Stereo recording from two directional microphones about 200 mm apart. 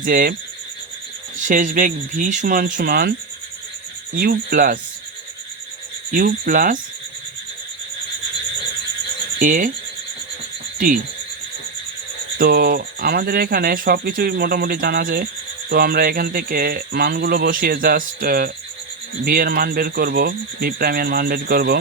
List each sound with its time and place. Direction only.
0.0 s speech: 45° right (ahead or behind)
1.5 s speech: 40° right (ahead or behind)
6.1 s speech: 45° right (ahead or behind)
9.4 s speech: 40° right (ahead or behind)
10.8 s speech: 40° right (ahead or behind)
12.4 s speech: 50° right (ahead or behind)